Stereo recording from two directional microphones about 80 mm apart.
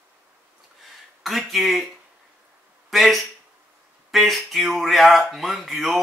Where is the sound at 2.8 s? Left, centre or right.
Centre.